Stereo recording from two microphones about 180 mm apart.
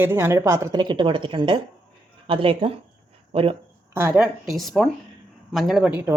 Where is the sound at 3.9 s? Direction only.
10° right (ahead or behind).